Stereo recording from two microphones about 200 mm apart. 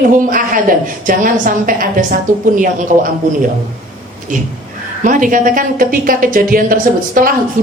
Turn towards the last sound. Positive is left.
turn(degrees=-45)  # may be behind; listen again after turning